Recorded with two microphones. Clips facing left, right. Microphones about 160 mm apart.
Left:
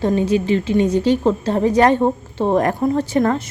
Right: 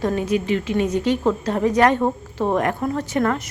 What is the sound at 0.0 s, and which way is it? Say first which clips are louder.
A woman's voice: left 4 dB; 30° left (ahead or behind).